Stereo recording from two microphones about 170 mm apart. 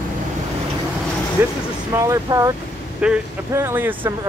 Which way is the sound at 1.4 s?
10° right (ahead or behind).